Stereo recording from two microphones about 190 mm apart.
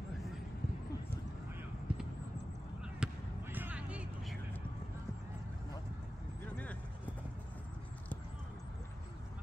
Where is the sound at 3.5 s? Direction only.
10° right (ahead or behind).